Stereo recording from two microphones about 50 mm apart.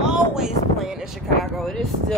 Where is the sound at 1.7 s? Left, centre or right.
Centre.